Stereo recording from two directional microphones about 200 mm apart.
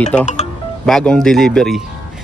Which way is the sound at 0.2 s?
35° left (ahead or behind).